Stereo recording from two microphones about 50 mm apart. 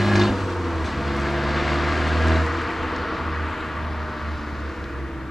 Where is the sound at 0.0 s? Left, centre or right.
Centre.